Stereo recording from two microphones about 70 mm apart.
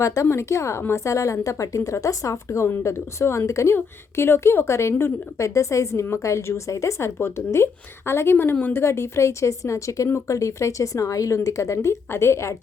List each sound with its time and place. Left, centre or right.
0.0 s a woman's voice: left